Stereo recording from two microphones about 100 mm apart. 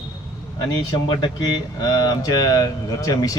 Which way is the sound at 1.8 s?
40° left (ahead or behind).